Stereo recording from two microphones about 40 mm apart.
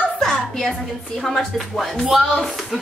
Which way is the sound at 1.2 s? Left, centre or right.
Centre.